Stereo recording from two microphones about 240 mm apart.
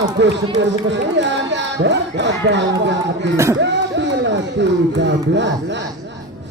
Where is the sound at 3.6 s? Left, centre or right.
Right.